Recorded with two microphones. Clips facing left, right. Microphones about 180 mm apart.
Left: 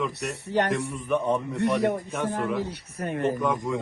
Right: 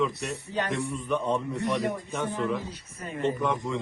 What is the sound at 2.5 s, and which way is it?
Speech, 70° left (ahead or behind).